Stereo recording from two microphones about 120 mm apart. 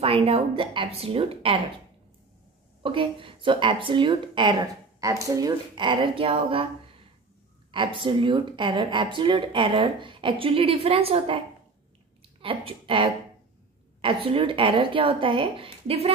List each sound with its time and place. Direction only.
0.0 s speech: 55° right (ahead or behind)
2.8 s speech: 45° right (ahead or behind)
5.0 s speech: 30° right (ahead or behind)
5.8 s speech: 45° right (ahead or behind)
7.7 s speech: 45° right (ahead or behind)